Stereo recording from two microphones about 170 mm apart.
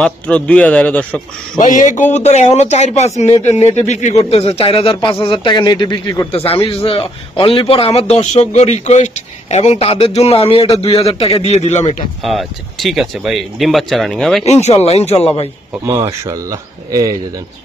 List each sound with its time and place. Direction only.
0.0 s speech: 5° left (ahead or behind)
1.6 s a man's voice: 50° left (ahead or behind); by 6.2 s 25° left (ahead or behind)
6.3 s a man's voice: 35° left (ahead or behind)
12.2 s speech: centre (ahead or behind)
14.4 s a man's voice: 40° left (ahead or behind)
15.8 s speech: 15° right (ahead or behind)